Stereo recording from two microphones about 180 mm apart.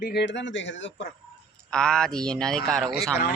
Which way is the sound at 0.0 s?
65° left (ahead or behind).